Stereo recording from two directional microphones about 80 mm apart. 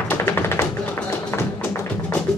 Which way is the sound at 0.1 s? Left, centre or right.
Left.